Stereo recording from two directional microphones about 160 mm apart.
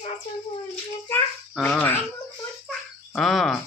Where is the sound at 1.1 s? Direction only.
10° left (ahead or behind).